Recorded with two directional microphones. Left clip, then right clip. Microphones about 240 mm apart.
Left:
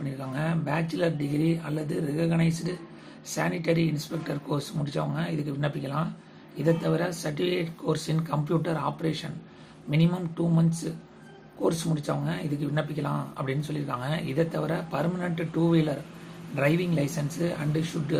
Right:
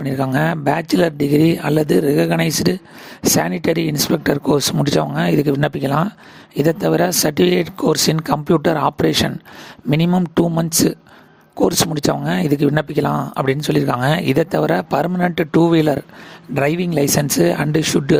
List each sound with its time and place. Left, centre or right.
0.0 s speech: right
11.9 s speech: right